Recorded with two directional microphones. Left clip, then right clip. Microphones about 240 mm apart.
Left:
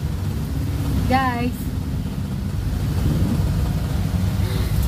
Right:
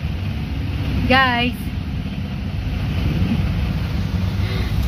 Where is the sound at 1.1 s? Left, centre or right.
Right.